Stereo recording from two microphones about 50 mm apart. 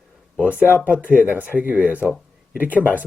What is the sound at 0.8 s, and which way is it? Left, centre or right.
Speech, right.